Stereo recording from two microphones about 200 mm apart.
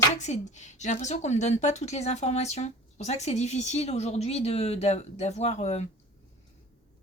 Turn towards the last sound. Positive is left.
turn(degrees=35)  # may be behind; listen again after turning